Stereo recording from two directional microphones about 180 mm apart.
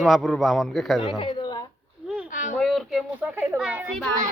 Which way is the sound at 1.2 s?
25° left (ahead or behind).